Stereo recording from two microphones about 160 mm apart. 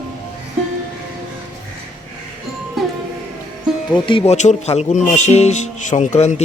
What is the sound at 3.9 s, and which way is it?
Speech, 30° left (ahead or behind).